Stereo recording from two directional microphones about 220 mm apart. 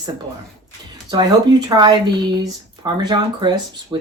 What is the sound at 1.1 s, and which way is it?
Speech, 20° right (ahead or behind).